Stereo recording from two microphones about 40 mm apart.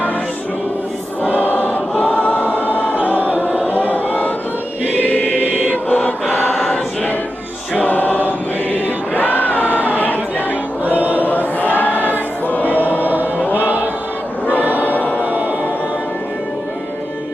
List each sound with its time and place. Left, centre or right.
1.5 s choir: left
2.0 s choir: left
5.4 s mantra: left
7.8 s choir: left
11.1 s choir: left
12.1 s music: left
14.6 s choir: right
14.9 s music: left
15.2 s music: right